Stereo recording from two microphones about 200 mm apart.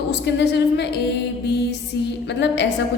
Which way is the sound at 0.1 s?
60° left (ahead or behind).